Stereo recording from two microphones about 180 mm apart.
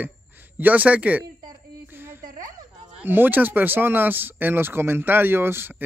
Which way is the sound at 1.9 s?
10° right (ahead or behind).